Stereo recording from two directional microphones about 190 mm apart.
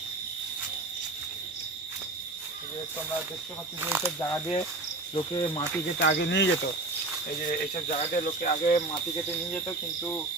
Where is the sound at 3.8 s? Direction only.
10° right (ahead or behind).